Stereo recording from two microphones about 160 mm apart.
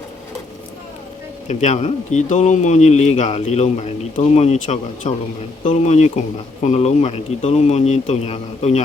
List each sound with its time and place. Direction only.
1.5 s speech: 45° left (ahead or behind)